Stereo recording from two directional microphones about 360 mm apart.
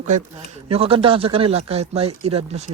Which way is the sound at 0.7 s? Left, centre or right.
Centre.